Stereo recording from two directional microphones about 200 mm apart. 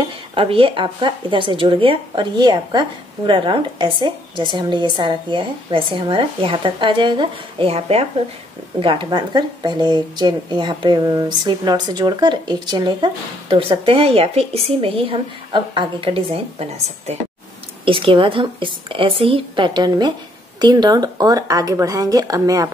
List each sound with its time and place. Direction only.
0.3 s speech: 25° right (ahead or behind)